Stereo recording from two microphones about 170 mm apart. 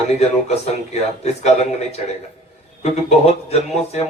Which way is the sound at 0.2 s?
40° left (ahead or behind).